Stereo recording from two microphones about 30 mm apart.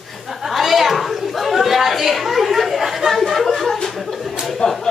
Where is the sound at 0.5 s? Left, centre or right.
Centre.